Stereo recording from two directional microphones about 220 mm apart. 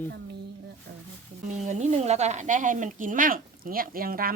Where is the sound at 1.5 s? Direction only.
30° right (ahead or behind).